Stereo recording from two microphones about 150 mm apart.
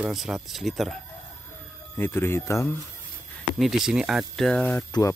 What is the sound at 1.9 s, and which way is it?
Speech, 15° left (ahead or behind).